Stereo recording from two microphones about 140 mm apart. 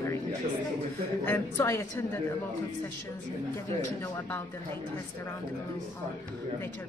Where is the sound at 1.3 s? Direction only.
15° left (ahead or behind).